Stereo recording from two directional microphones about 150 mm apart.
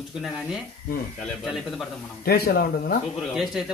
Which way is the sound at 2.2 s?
90° left.